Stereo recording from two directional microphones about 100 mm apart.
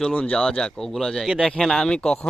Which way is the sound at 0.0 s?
10° left (ahead or behind).